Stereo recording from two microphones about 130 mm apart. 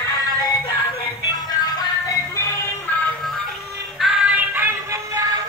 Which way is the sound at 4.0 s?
5° right (ahead or behind).